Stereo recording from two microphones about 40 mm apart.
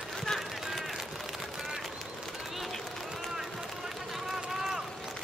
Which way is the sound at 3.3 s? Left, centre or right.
Centre.